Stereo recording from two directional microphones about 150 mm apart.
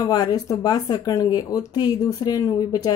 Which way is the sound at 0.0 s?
25° left (ahead or behind).